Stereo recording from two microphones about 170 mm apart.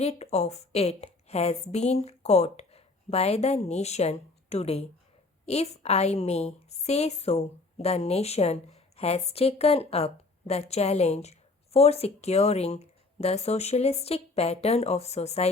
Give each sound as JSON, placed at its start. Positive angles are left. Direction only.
{"t": 0.0, "sound": "a woman's voice", "side_deg": 40}